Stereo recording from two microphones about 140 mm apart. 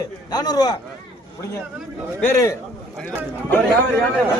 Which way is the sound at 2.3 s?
20° left (ahead or behind).